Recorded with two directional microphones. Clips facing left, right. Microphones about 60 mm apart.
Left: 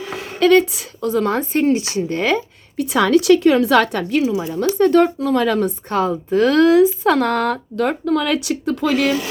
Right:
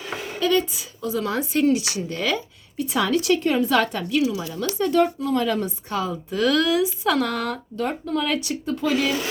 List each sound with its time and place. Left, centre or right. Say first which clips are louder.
0.3 s speech: left 9 dB; left
2.7 s a woman's voice: left 7 dB; left
4.1 s speech: left 4 dB; left
4.8 s speech: left 6 dB; left
5.5 s speech: left 7 dB; left
7.8 s speech: left 6 dB; left